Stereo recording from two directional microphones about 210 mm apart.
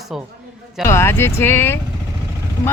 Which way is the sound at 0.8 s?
10° left (ahead or behind).